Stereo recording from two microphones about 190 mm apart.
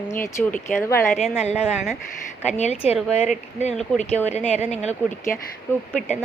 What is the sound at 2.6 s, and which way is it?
Speech, 35° left (ahead or behind).